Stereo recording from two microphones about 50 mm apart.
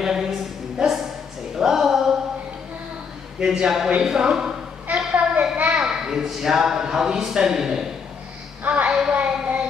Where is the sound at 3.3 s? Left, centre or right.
Centre.